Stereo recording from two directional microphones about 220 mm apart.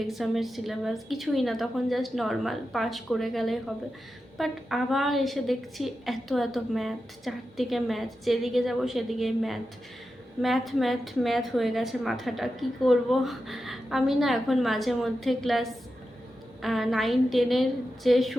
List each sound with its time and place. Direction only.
0.1 s a woman's voice: centre (ahead or behind)